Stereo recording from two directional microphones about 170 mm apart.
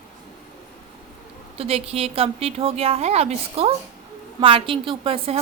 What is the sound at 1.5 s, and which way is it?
Speech, 35° right (ahead or behind).